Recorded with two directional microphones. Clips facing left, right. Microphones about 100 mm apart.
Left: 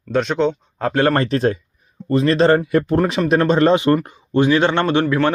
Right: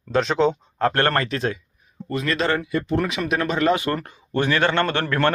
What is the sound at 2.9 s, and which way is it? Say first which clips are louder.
Speech: left 6 dB; 35° left (ahead or behind).